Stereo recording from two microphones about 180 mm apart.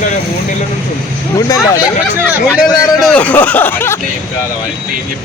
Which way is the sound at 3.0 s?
5° left (ahead or behind).